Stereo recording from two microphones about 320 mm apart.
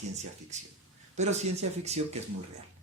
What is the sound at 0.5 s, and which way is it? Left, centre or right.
Speech, right.